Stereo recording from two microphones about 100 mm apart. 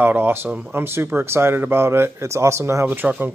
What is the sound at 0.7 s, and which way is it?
Speech, 25° right (ahead or behind).